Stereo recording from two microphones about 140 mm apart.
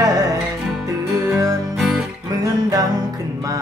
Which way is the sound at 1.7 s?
5° right (ahead or behind).